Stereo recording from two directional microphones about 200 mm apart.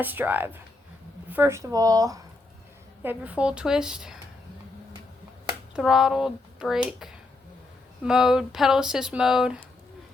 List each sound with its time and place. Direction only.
0.0 s speech: 10° right (ahead or behind)
5.7 s speech: centre (ahead or behind)
8.0 s speech: centre (ahead or behind)